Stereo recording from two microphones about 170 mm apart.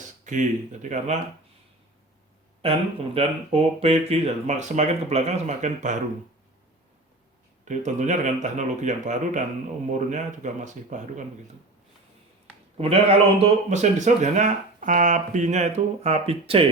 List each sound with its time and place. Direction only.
0.3 s speech: 45° right (ahead or behind)
2.6 s speech: 35° right (ahead or behind)
7.6 s speech: 45° right (ahead or behind)
12.7 s speech: 35° right (ahead or behind)